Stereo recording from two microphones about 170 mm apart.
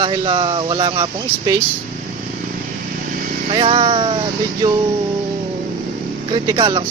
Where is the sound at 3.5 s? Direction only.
35° right (ahead or behind).